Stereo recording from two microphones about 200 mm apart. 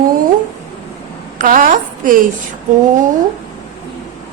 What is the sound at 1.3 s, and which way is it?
Speech, 40° right (ahead or behind).